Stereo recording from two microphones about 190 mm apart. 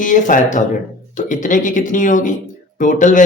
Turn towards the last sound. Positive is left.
turn(degrees=40)  # may be behind; listen again after turning